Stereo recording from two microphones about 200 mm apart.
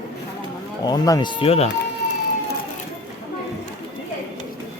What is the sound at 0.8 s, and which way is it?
Speech, 20° left (ahead or behind).